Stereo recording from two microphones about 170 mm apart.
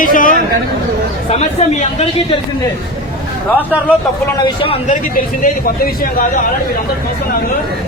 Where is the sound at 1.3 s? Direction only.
40° left (ahead or behind).